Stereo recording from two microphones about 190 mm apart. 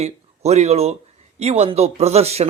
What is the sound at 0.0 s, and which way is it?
A man's voice, 35° right (ahead or behind).